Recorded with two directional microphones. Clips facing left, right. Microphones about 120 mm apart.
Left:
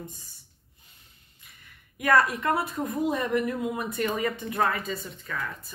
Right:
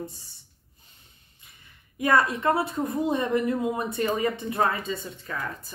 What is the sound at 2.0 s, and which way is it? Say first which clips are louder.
A woman's voice: even; 25° right (ahead or behind).